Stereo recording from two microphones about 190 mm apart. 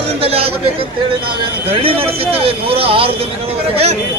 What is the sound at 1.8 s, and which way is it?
Speech, 30° right (ahead or behind).